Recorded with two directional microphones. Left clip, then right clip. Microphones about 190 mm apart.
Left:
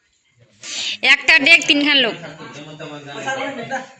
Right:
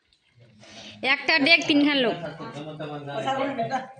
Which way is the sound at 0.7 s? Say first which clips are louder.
Left 10 dB; 5° right (ahead or behind).